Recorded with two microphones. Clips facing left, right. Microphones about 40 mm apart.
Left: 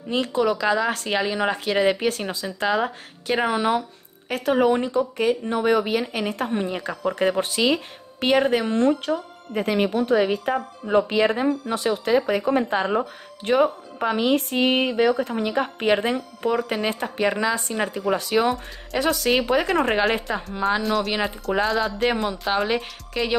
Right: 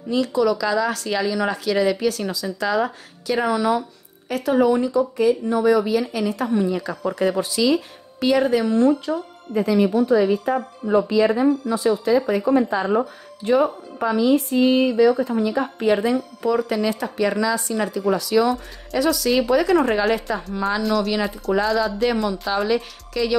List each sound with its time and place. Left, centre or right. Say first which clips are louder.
0.1 s speech: right 2 dB; left
20.8 s speech: right 2 dB; centre
22.1 s speech: right 1 dB; left